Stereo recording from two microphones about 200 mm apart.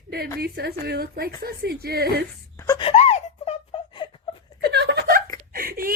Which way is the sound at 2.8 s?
30° left (ahead or behind).